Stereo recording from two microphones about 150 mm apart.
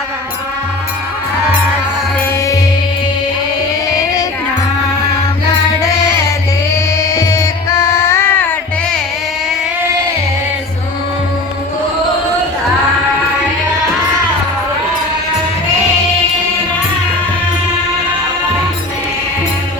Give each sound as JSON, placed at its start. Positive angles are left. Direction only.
{"t": 3.8, "sound": "music", "side_deg": 25}
{"t": 6.9, "sound": "music", "side_deg": 20}